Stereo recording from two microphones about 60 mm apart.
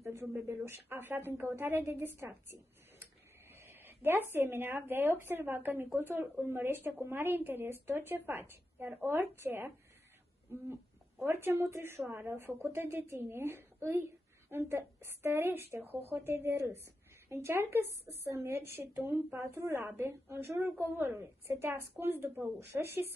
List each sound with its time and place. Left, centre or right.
0.0 s a sound: right
0.7 s a woman's voice: right
3.5 s a woman's voice: right
11.2 s a woman's voice: right
19.5 s a woman's voice: right